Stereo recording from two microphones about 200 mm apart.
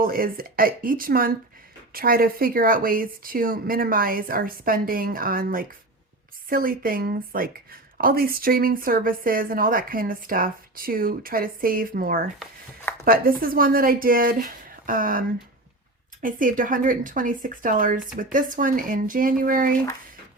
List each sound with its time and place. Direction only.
0.0 s a woman's voice: 45° right (ahead or behind)
16.2 s a woman's voice: 45° right (ahead or behind)